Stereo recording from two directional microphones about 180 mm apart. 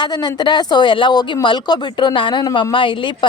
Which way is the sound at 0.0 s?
25° left (ahead or behind).